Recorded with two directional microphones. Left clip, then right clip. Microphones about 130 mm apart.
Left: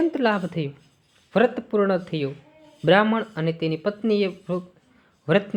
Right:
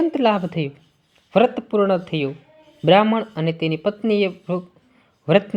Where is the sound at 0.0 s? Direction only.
30° right (ahead or behind).